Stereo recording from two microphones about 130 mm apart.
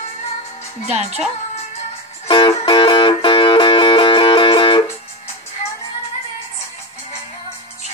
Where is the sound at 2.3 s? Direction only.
40° left (ahead or behind).